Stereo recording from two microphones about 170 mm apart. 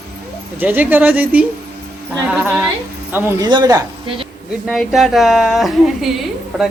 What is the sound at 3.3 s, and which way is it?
Speech, 25° right (ahead or behind).